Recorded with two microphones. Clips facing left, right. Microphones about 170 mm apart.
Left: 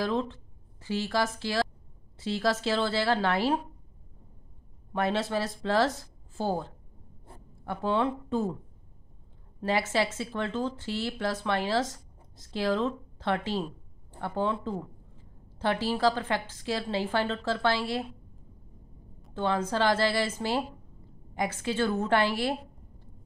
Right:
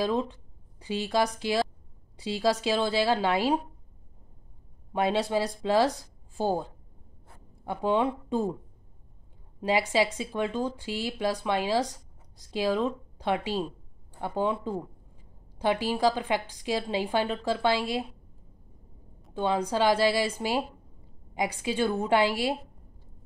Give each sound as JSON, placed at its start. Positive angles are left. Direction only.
{"t": 0.0, "sound": "speech", "side_deg": -15}
{"t": 4.9, "sound": "speech", "side_deg": -15}
{"t": 9.6, "sound": "speech", "side_deg": -15}
{"t": 19.3, "sound": "speech", "side_deg": -15}